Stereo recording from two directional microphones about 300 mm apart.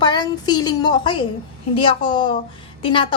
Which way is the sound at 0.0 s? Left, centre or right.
Centre.